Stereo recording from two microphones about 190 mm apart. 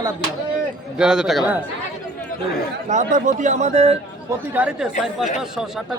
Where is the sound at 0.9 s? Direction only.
5° right (ahead or behind).